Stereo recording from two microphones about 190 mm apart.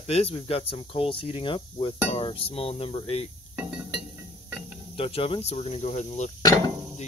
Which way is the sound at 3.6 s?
5° right (ahead or behind).